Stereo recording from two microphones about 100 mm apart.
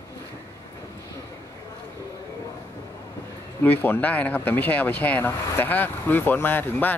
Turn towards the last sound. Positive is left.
turn(degrees=20)  # may be behind; listen again after turning